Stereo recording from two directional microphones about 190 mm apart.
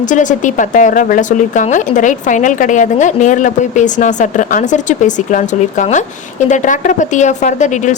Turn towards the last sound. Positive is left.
turn(degrees=40)  # may be behind; listen again after turning